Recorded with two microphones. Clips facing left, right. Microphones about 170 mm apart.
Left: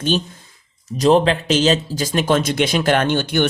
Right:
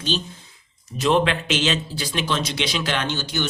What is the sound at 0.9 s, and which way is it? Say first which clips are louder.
Speech: left 5 dB; 35° left (ahead or behind).